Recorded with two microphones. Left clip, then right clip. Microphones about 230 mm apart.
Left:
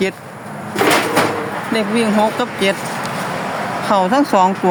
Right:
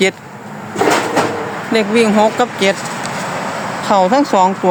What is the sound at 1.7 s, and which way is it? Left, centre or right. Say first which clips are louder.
Speech: right 4 dB; right.